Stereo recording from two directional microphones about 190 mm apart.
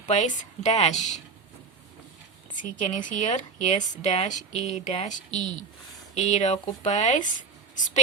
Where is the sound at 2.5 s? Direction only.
40° left (ahead or behind).